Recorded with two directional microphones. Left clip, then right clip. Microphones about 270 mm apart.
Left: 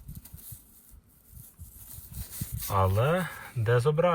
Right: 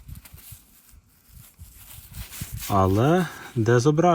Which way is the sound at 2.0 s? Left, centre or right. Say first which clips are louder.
Right 5 dB; centre.